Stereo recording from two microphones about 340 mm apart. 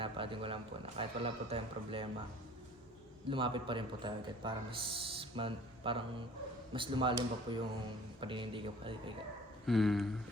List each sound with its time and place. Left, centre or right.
0.0 s a man's voice: centre
3.2 s a man's voice: centre
9.6 s speech: centre